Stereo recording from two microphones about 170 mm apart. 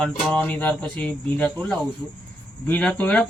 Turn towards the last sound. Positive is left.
turn(degrees=10)  # may be behind; listen again after turning